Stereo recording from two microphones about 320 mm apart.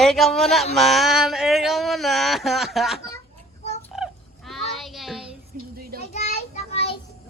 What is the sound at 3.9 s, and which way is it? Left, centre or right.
Fowl, centre.